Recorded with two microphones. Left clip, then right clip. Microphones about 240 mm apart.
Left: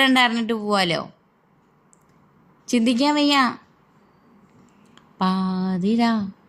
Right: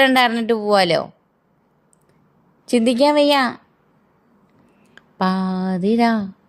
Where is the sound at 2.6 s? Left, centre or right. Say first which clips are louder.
Right 5 dB; right.